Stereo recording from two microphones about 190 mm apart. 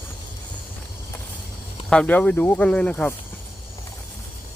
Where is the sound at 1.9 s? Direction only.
5° left (ahead or behind).